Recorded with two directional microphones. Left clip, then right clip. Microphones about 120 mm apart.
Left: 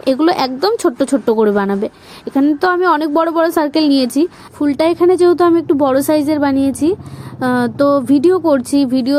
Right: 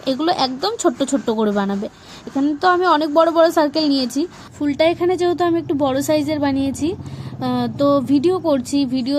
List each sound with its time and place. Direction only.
0.0 s a woman's voice: 35° left (ahead or behind)